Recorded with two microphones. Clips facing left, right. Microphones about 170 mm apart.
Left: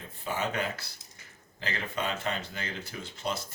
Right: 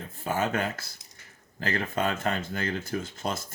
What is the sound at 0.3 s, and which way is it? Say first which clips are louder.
Speech: right 4 dB; 50° right (ahead or behind).